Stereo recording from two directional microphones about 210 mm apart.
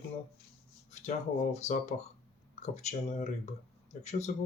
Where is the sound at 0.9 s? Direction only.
30° left (ahead or behind).